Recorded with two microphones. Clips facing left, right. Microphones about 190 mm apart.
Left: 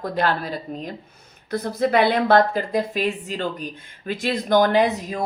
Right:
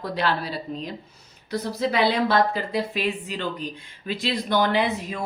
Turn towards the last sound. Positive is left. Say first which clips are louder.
# left 4 dB
turn(degrees=40)  # may be behind; listen again after turning